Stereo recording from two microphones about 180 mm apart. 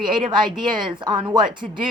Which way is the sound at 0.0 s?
25° right (ahead or behind).